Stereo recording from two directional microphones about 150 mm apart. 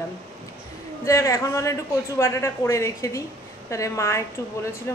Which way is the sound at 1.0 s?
20° left (ahead or behind).